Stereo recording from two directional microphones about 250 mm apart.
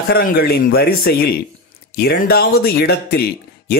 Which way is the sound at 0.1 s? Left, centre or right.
Left.